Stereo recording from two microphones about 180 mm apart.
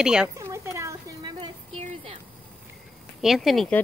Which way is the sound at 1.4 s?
30° right (ahead or behind).